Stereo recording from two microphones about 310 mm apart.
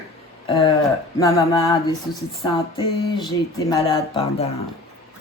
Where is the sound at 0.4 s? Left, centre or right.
Centre.